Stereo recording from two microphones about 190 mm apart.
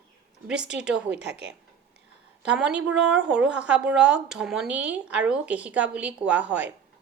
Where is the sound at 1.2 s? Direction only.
30° left (ahead or behind).